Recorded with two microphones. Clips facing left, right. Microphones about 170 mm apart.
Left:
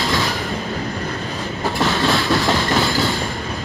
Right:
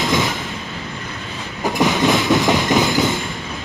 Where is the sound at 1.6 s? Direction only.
15° right (ahead or behind).